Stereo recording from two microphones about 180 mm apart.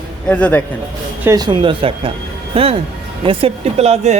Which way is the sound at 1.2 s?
20° right (ahead or behind).